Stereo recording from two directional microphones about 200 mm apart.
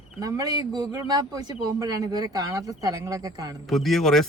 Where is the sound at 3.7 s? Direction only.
Centre (ahead or behind).